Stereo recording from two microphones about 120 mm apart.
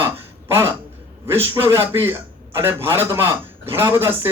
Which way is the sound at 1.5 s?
20° right (ahead or behind).